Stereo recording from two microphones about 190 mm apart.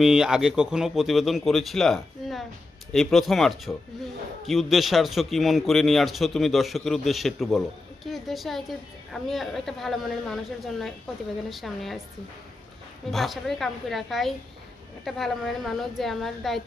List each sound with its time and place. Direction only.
0.0 s a man's voice: 5° right (ahead or behind)
13.1 s a man's voice: centre (ahead or behind)